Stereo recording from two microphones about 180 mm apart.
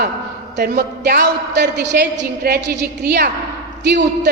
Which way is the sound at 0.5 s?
60° right (ahead or behind).